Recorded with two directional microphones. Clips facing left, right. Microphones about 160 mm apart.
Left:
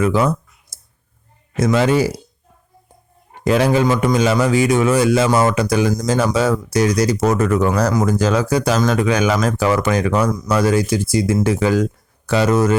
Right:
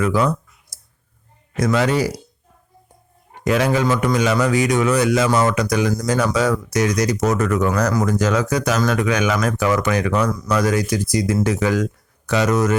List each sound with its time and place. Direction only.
0.0 s clicking: 25° left (ahead or behind)
1.5 s speech: 25° left (ahead or behind)
3.4 s a man's voice: 30° left (ahead or behind)